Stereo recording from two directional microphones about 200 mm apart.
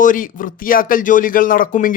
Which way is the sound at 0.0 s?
45° left (ahead or behind).